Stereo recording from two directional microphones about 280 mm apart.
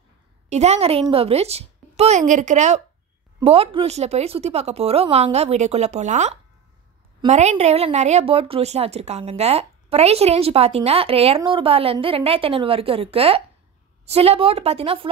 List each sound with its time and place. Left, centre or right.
0.5 s a woman's voice: right